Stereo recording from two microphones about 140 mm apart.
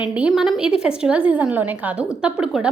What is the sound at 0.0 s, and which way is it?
A woman's voice, 5° right (ahead or behind).